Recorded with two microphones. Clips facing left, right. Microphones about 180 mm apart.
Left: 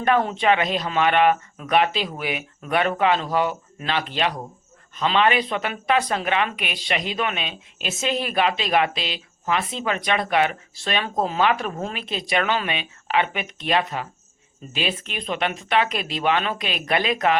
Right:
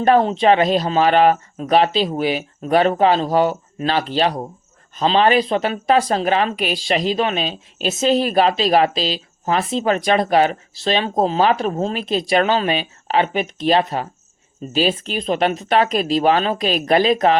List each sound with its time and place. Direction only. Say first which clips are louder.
0.0 s speech: right 6 dB; 30° right (ahead or behind)